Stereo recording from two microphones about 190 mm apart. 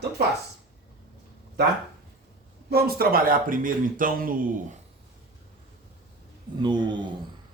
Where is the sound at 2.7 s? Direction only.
55° right (ahead or behind).